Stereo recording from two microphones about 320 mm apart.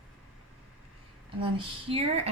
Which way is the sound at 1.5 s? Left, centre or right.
Centre.